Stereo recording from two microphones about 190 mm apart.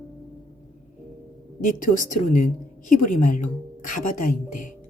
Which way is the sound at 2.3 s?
45° left (ahead or behind).